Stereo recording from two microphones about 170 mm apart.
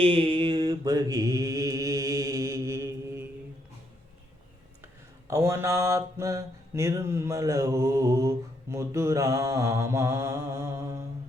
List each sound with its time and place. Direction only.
0.0 s mantra: 30° right (ahead or behind); by 3.2 s 15° right (ahead or behind)
5.3 s mantra: 15° right (ahead or behind)